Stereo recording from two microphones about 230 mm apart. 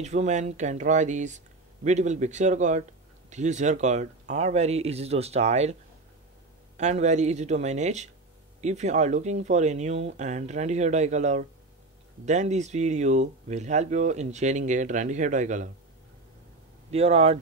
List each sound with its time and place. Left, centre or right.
0.0 s speech: right
6.8 s speech: right
16.9 s speech: right